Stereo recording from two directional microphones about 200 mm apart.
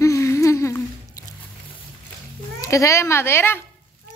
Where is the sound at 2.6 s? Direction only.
15° left (ahead or behind).